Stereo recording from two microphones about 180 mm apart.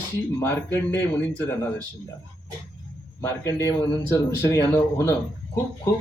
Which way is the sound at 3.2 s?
15° left (ahead or behind).